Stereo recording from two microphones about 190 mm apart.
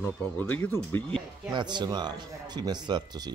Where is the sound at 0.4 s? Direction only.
10° left (ahead or behind).